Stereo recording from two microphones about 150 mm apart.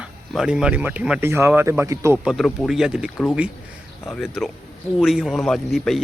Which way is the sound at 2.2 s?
Centre (ahead or behind).